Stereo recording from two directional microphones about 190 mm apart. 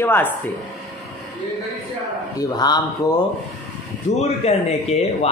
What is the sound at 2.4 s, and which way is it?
Speech, 20° left (ahead or behind).